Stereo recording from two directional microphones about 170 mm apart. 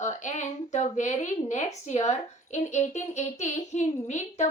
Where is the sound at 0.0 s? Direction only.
45° left (ahead or behind).